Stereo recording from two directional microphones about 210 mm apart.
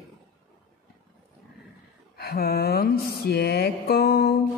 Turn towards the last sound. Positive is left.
turn(degrees=50)  # may be behind; listen again after turning